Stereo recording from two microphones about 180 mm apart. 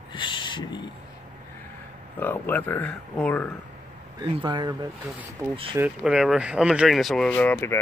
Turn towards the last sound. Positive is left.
turn(degrees=10)  # may be behind; listen again after turning